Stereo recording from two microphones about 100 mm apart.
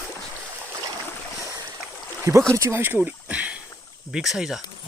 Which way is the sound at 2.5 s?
25° right (ahead or behind).